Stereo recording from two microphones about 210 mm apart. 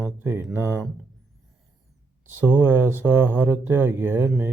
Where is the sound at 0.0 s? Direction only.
10° right (ahead or behind).